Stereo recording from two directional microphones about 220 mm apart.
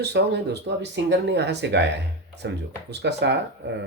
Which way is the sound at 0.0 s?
50° right (ahead or behind).